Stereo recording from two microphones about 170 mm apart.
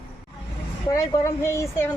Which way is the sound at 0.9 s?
20° left (ahead or behind).